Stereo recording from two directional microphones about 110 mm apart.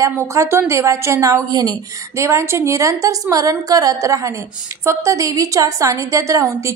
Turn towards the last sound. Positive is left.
turn(degrees=-30)  # may be behind; listen again after turning